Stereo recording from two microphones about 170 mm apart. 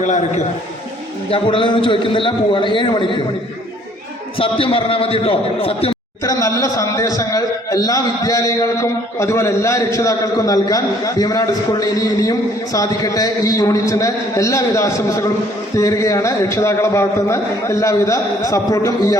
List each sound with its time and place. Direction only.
0.0 s a man's voice: 45° left (ahead or behind)
1.3 s a man's voice: 30° left (ahead or behind)
4.4 s a man's voice: 35° left (ahead or behind)
6.2 s a man's voice: 20° left (ahead or behind)